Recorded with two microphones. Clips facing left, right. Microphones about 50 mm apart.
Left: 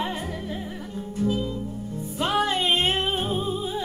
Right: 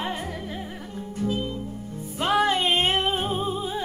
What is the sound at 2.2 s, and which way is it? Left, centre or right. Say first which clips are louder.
Music: right 2 dB; right.